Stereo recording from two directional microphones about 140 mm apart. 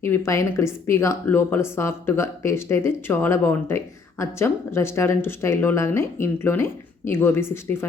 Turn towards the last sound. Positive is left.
turn(degrees=15)  # may be behind; listen again after turning